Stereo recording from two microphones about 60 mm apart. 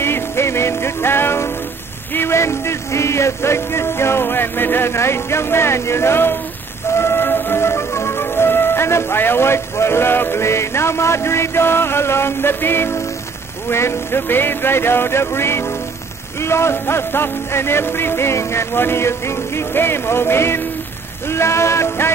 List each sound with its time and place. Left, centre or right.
0.0 s music: left
2.1 s speech: left
6.9 s music: left
16.3 s speech: left